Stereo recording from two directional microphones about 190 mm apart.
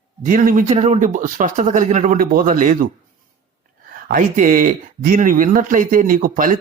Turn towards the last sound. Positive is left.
turn(degrees=-45)  # may be behind; listen again after turning